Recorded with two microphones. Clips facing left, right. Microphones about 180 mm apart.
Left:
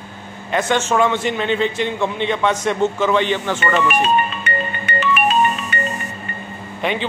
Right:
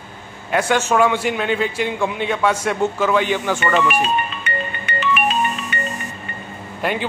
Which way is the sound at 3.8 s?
45° left (ahead or behind).